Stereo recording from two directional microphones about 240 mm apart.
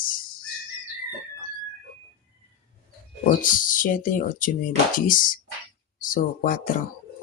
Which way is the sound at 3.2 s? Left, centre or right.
Left.